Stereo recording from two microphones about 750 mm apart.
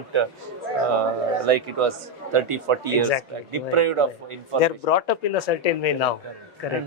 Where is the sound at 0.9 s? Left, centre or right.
Right.